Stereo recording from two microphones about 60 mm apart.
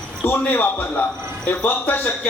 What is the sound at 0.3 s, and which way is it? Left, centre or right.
A man's voice, left.